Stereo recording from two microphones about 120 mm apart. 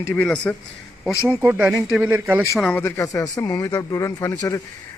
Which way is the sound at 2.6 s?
10° left (ahead or behind).